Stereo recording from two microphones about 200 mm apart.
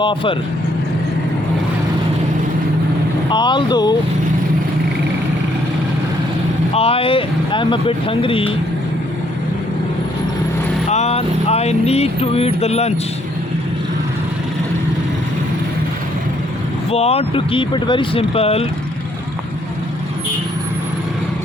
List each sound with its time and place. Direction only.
0.0 s speech: 25° left (ahead or behind)
3.2 s speech: 25° left (ahead or behind)
6.7 s speech: 30° left (ahead or behind)
10.8 s speech: 35° left (ahead or behind)
16.9 s speech: 30° left (ahead or behind)